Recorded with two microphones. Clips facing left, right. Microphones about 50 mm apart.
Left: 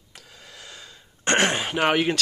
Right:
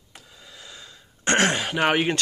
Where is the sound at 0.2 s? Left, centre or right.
Left.